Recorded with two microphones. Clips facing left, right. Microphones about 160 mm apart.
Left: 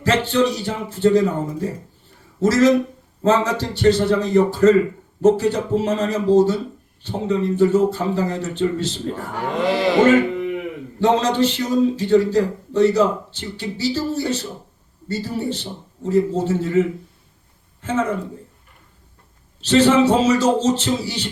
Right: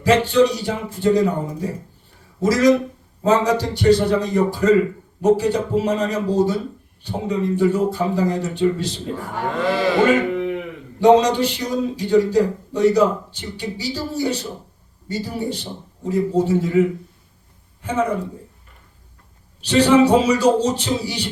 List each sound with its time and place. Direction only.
0.0 s speech: 15° right (ahead or behind)
9.1 s speech: 20° left (ahead or behind)
11.0 s speech: 15° right (ahead or behind)
19.6 s speech: 15° right (ahead or behind)